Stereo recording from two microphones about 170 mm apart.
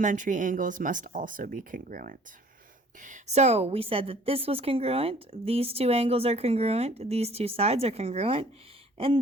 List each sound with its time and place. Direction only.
0.0 s a woman's voice: 50° right (ahead or behind)